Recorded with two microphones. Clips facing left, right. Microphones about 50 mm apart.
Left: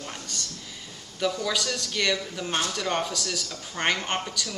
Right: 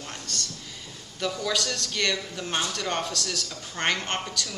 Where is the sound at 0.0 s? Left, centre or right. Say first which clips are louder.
Even; centre.